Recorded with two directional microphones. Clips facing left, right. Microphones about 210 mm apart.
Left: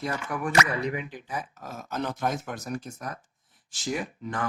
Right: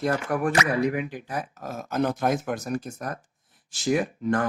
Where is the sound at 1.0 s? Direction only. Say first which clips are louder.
Right 6 dB; 10° right (ahead or behind).